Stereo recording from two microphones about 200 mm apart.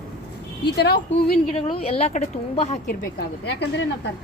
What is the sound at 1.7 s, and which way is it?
Speech, 30° left (ahead or behind).